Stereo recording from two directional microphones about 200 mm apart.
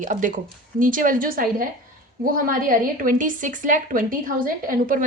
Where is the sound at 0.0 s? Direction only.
40° right (ahead or behind).